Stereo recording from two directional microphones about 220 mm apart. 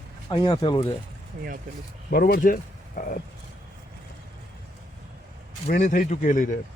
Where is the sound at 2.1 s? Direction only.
40° left (ahead or behind).